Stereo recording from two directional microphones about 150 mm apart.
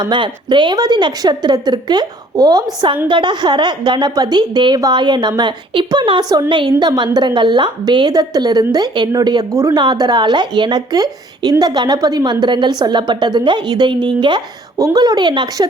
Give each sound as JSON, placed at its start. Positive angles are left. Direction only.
{"t": 0.0, "sound": "a woman's voice", "side_deg": -30}